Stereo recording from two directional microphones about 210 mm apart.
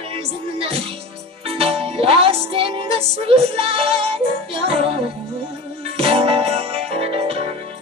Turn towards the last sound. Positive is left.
turn(degrees=-30)  # may be behind; listen again after turning